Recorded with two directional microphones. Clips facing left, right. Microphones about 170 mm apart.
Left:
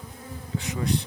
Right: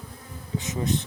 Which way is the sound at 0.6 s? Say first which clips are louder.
Even; 20° right (ahead or behind).